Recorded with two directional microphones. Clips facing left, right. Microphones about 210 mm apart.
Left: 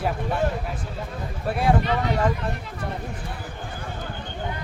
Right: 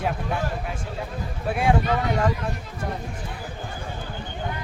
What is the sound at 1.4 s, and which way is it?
Speech, centre (ahead or behind).